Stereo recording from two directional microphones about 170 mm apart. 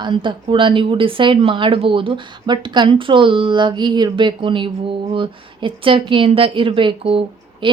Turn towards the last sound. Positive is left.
turn(degrees=-30)  # may be behind; listen again after turning